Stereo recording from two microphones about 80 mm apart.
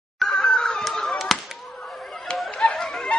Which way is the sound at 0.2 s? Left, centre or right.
Centre.